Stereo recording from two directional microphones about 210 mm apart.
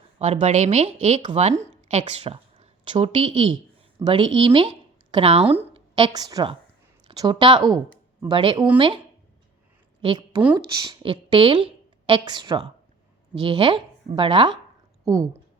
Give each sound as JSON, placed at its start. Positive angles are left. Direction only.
{"t": 0.2, "sound": "a woman's voice", "side_deg": -30}
{"t": 10.0, "sound": "a woman's voice", "side_deg": -20}